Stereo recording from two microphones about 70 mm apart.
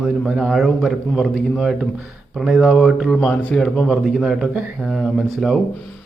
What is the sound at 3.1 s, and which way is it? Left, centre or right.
Speech, centre.